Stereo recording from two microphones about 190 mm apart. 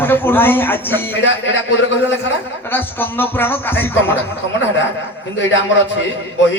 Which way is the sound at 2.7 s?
10° left (ahead or behind).